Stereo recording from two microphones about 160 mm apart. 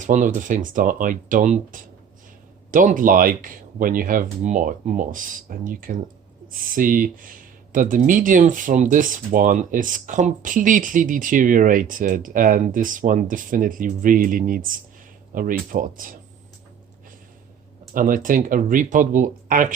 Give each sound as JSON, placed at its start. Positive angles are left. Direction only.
{"t": 0.0, "sound": "speech", "side_deg": -50}
{"t": 17.9, "sound": "speech", "side_deg": -55}